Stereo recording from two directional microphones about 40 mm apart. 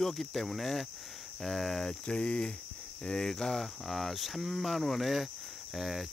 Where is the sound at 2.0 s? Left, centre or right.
Left.